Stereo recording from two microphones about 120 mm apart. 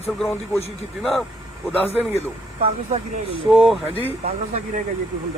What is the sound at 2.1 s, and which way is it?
Speech, 55° right (ahead or behind).